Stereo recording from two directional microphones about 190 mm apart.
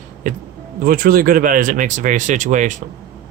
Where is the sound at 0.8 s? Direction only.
50° right (ahead or behind).